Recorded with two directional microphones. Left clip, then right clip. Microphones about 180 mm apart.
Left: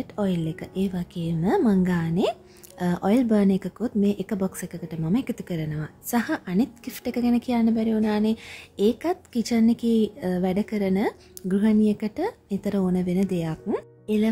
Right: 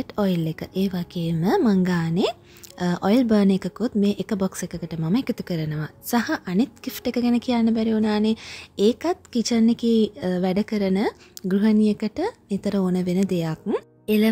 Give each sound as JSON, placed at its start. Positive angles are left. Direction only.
{"t": 0.0, "sound": "speech", "side_deg": -30}